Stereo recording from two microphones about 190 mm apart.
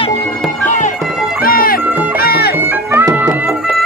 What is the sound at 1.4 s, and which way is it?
Music, 50° left (ahead or behind).